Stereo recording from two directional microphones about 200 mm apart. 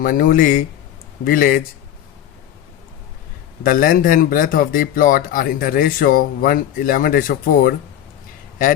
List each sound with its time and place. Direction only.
0.0 s a man's voice: 45° left (ahead or behind)
3.6 s a man's voice: 45° left (ahead or behind)